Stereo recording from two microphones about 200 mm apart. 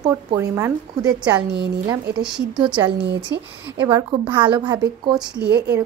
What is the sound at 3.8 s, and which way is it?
A woman's voice, 20° right (ahead or behind).